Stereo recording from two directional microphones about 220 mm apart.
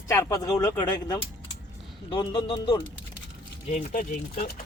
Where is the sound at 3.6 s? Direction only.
30° left (ahead or behind).